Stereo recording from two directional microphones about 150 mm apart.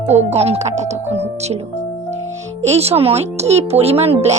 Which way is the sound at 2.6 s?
45° right (ahead or behind).